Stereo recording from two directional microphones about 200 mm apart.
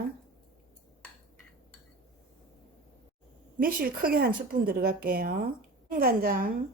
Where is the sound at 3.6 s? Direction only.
45° right (ahead or behind).